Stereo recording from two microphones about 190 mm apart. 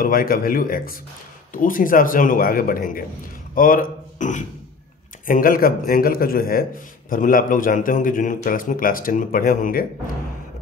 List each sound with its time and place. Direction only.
0.0 s a man's voice: 50° left (ahead or behind)